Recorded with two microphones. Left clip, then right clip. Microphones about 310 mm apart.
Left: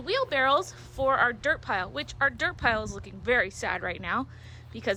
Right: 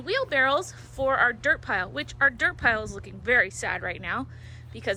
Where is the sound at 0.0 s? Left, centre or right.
Centre.